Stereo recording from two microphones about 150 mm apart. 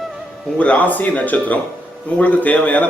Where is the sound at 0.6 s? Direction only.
10° left (ahead or behind).